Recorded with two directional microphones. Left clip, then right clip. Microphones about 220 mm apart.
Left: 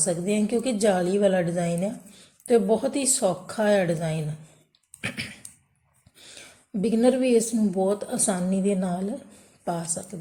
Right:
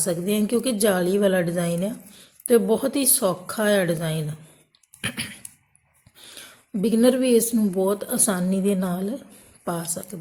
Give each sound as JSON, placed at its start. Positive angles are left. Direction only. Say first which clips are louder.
{"t": 0.0, "sound": "speech", "louder": "right 1 dB", "side_deg": -20}
{"t": 4.9, "sound": "a sound", "louder": "right 2 dB", "side_deg": -20}
{"t": 6.1, "sound": "speech", "louder": "right 3 dB", "side_deg": -20}